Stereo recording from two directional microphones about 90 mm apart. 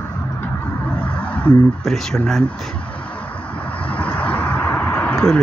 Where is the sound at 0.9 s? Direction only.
15° left (ahead or behind).